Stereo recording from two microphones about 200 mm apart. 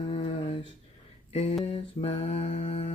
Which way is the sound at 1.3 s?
30° left (ahead or behind).